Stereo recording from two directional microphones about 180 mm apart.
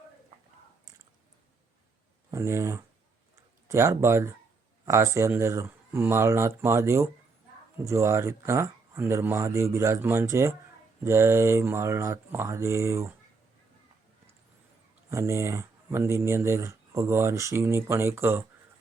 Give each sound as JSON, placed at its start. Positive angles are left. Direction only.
{"t": 2.3, "sound": "speech", "side_deg": -15}
{"t": 15.1, "sound": "speech", "side_deg": -15}